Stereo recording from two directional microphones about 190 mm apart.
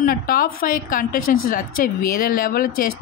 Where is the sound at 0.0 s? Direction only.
45° left (ahead or behind).